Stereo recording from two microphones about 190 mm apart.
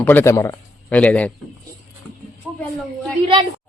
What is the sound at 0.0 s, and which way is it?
A man's voice, 10° left (ahead or behind).